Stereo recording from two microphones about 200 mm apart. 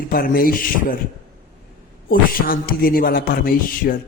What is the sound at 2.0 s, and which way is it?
A man's voice, 45° left (ahead or behind).